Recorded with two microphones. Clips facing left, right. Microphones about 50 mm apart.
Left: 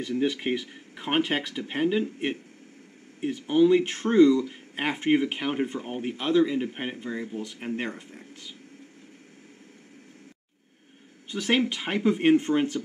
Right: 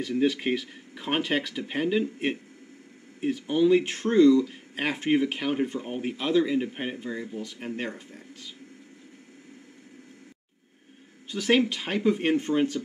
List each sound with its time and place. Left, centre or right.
0.2 s speech: centre
4.5 s speech: centre
11.2 s speech: centre